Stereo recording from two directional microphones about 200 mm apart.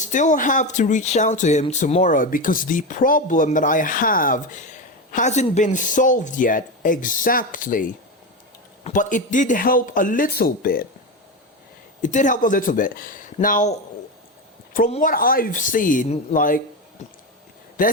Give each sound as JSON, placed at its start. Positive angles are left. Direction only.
{"t": 0.0, "sound": "speech", "side_deg": 40}
{"t": 12.0, "sound": "speech", "side_deg": 40}
{"t": 14.8, "sound": "speech", "side_deg": 30}
{"t": 15.1, "sound": "speech", "side_deg": 45}
{"t": 17.8, "sound": "speech", "side_deg": 40}